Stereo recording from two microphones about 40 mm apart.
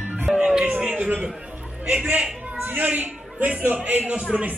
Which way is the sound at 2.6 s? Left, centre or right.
Right.